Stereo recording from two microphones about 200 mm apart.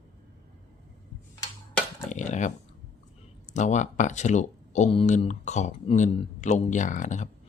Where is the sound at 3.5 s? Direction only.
35° left (ahead or behind).